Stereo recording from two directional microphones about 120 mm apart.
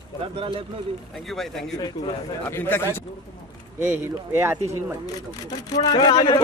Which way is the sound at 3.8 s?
20° right (ahead or behind).